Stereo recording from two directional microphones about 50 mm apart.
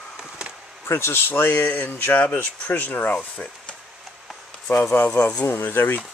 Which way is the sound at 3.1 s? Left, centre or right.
Left.